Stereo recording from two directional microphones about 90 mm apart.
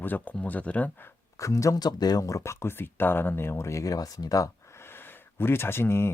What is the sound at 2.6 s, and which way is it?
Speech, 25° left (ahead or behind).